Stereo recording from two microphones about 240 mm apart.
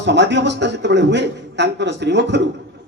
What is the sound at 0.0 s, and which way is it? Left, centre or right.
A man's voice, right.